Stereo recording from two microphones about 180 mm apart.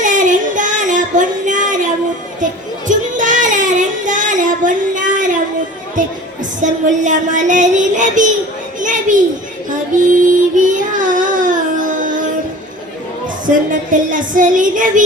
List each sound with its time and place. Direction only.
0.0 s child singing: 45° right (ahead or behind)
2.4 s music: 45° right (ahead or behind)
8.8 s a sound: 45° right (ahead or behind)
10.1 s child singing: 45° right (ahead or behind)
13.7 s music: 45° right (ahead or behind)